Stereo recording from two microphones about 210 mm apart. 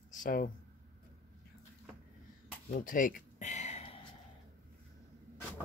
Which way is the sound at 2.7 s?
40° left (ahead or behind).